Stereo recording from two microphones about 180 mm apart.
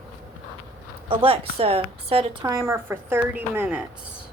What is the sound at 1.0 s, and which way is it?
A woman's voice, 30° right (ahead or behind).